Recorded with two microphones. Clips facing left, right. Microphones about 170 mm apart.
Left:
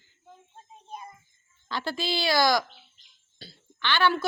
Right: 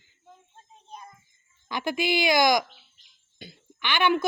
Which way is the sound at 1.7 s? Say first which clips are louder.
Right 4 dB; 15° right (ahead or behind).